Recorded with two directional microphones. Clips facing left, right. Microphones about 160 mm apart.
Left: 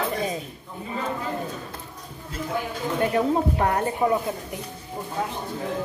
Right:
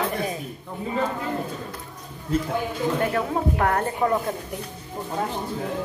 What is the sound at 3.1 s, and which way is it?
A woman's voice, 20° left (ahead or behind).